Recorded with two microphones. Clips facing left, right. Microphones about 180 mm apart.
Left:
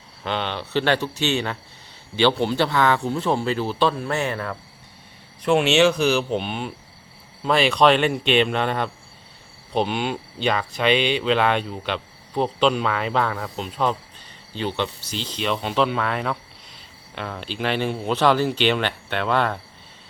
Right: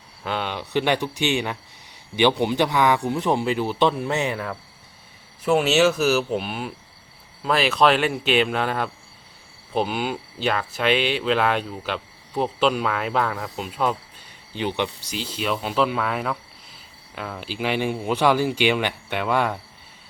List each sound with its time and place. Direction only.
0.3 s speech: 5° right (ahead or behind)
5.4 s speech: 5° right (ahead or behind)